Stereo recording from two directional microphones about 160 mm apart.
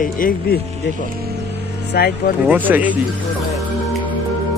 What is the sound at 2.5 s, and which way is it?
Speech, 10° right (ahead or behind).